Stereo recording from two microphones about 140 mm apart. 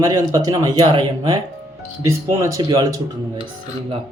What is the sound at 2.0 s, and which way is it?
Speech, 20° right (ahead or behind).